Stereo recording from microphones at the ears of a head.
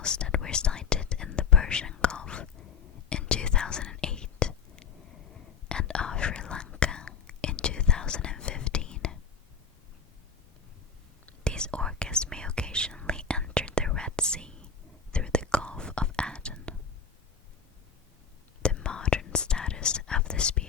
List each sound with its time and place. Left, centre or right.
0.0 s whispering: left
11.3 s whispering: centre
18.8 s whispering: left